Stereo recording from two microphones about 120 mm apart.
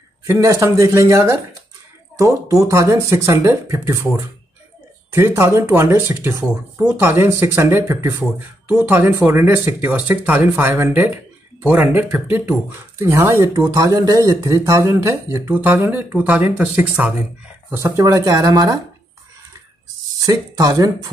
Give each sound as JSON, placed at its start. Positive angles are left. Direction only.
{"t": 0.3, "sound": "speech", "side_deg": -25}
{"t": 20.2, "sound": "speech", "side_deg": -30}